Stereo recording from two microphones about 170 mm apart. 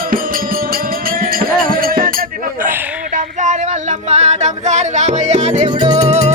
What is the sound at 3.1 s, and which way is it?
Singing, 45° right (ahead or behind).